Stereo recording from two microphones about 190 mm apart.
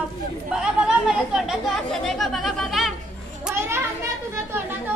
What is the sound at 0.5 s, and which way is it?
Speech, 5° right (ahead or behind).